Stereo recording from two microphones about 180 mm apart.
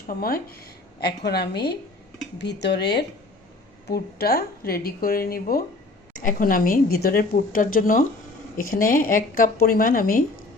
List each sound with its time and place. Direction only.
0.1 s a woman's voice: 55° left (ahead or behind)
3.8 s a woman's voice: 60° left (ahead or behind)